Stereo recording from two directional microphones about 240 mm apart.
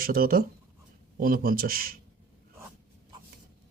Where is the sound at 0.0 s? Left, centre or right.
Right.